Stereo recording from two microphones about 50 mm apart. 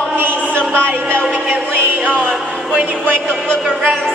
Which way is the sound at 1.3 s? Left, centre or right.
Right.